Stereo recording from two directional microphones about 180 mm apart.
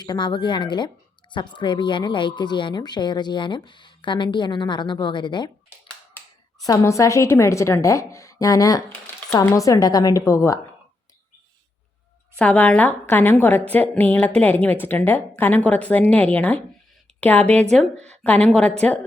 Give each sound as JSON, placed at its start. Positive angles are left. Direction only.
{"t": 0.0, "sound": "speech", "side_deg": 25}
{"t": 6.6, "sound": "a woman's voice", "side_deg": 20}
{"t": 12.4, "sound": "a woman's voice", "side_deg": 5}